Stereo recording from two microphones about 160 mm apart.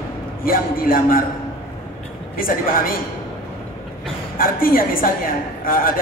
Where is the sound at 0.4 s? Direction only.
65° left (ahead or behind).